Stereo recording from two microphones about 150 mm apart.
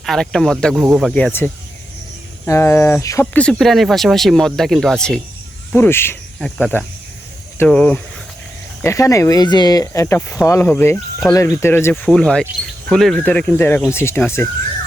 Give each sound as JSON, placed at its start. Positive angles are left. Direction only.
{"t": 0.0, "sound": "speech", "side_deg": 0}
{"t": 1.1, "sound": "speech", "side_deg": 10}
{"t": 3.3, "sound": "speech", "side_deg": 5}
{"t": 5.7, "sound": "speech", "side_deg": 15}
{"t": 8.8, "sound": "speech", "side_deg": 20}
{"t": 12.1, "sound": "speech", "side_deg": 5}